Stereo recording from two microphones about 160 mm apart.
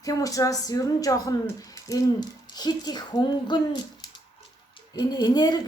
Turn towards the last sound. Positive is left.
turn(degrees=25)  # may be behind; listen again after turning